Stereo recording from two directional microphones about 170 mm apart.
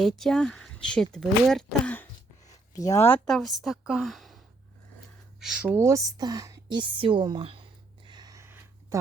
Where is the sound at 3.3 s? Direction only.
Centre (ahead or behind).